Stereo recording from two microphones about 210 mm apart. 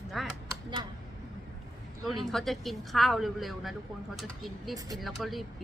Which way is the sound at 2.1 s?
Centre (ahead or behind).